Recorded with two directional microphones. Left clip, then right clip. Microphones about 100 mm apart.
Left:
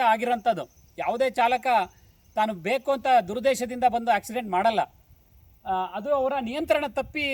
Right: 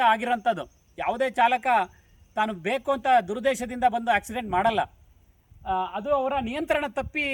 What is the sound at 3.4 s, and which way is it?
A woman's voice, 25° left (ahead or behind).